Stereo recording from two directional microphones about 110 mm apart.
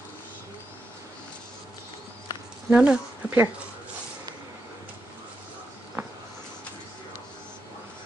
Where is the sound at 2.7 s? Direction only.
10° right (ahead or behind).